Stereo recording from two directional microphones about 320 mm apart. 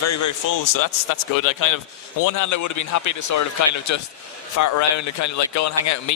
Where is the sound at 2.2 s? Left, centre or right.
Left.